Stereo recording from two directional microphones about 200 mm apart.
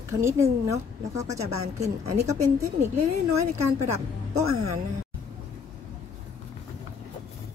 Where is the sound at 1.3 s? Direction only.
35° right (ahead or behind).